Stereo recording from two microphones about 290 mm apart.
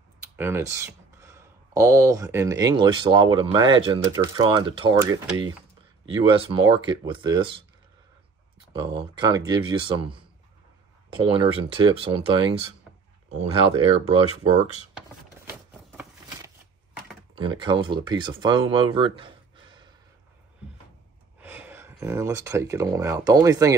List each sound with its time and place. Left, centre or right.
0.4 s speech: centre
8.7 s speech: centre
17.4 s speech: centre
21.4 s speech: centre